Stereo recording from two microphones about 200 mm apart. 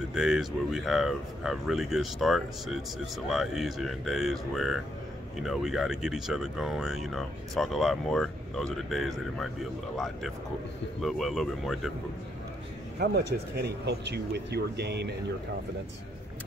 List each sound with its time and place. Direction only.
0.1 s speech: 5° right (ahead or behind)
13.0 s speech: 55° right (ahead or behind)